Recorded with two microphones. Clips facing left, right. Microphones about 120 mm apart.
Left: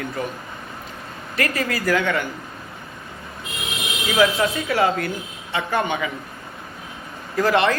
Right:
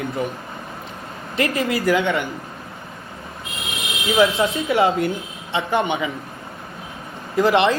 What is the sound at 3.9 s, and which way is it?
Speech, 25° right (ahead or behind).